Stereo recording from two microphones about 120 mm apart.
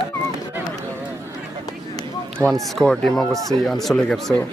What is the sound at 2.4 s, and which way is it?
Speech, centre (ahead or behind).